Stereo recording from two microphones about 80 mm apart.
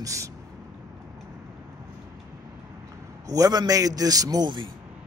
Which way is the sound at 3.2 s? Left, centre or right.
Right.